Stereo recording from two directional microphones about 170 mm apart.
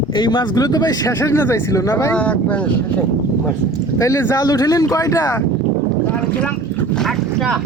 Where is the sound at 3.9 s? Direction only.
20° left (ahead or behind).